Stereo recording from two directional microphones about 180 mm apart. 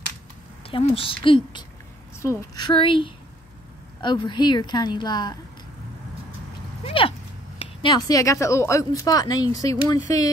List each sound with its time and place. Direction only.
0.7 s speech: 30° left (ahead or behind)
6.8 s speech: 30° left (ahead or behind)